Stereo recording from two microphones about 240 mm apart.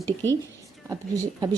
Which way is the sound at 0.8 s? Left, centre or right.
Centre.